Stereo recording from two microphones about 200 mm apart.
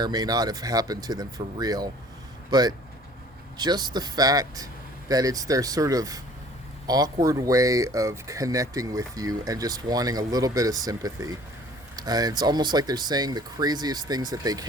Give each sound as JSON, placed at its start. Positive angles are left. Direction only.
{"t": 0.0, "sound": "speech", "side_deg": -20}